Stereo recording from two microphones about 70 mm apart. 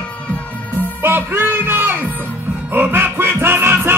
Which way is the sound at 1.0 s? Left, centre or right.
Right.